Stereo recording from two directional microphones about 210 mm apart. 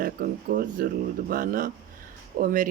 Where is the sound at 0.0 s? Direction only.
40° right (ahead or behind).